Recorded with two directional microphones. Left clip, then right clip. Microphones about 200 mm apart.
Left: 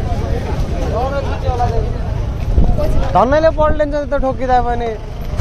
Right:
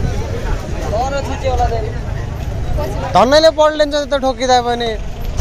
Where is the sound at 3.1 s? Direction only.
20° right (ahead or behind).